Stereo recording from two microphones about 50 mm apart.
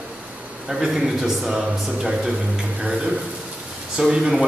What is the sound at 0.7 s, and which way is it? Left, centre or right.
Speech, centre.